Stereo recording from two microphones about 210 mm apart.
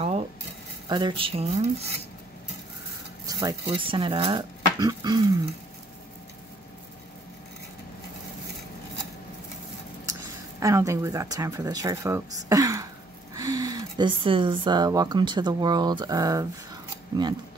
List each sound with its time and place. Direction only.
0.8 s speech: 20° right (ahead or behind)
3.3 s a sound: 15° right (ahead or behind)
3.6 s speech: 25° right (ahead or behind)
10.0 s speech: 15° right (ahead or behind)